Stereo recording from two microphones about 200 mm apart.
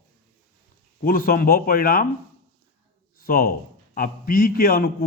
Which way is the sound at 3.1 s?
50° left (ahead or behind).